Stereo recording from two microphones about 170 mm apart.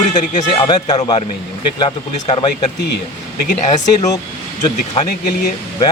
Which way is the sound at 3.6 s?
45° left (ahead or behind).